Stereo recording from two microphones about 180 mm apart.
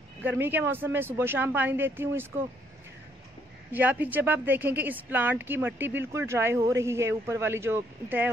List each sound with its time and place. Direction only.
0.2 s speech: 10° right (ahead or behind)
3.7 s speech: 10° right (ahead or behind)